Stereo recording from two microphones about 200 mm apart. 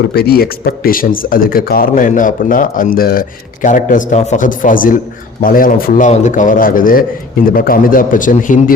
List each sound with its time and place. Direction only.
0.1 s speech: 50° left (ahead or behind)